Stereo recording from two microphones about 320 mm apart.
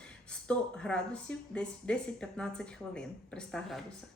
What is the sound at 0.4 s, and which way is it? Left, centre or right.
Speech, centre.